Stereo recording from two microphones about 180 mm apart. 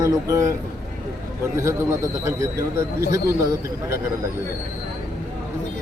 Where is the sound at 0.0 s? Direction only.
20° right (ahead or behind).